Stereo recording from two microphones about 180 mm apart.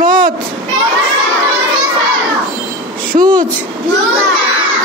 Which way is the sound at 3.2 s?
25° right (ahead or behind).